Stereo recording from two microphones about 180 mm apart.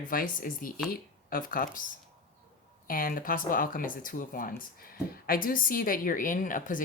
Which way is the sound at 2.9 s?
50° left (ahead or behind).